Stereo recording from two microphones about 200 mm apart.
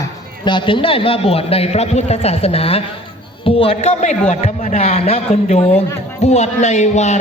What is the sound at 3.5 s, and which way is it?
A man's voice, 30° left (ahead or behind).